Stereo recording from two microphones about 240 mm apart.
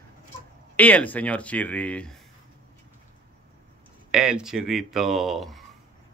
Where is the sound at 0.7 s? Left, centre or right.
Centre.